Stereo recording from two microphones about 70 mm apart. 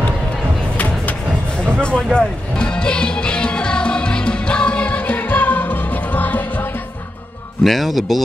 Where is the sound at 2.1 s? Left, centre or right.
Centre.